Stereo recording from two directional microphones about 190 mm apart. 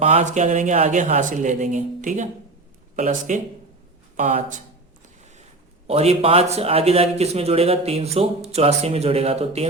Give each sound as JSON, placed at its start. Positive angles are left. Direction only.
{"t": 0.0, "sound": "a man's voice", "side_deg": -35}
{"t": 5.9, "sound": "a man's voice", "side_deg": -30}